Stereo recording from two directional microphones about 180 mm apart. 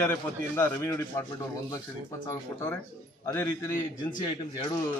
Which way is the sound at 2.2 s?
20° left (ahead or behind).